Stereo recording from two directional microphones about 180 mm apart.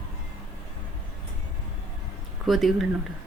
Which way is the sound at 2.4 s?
Centre (ahead or behind).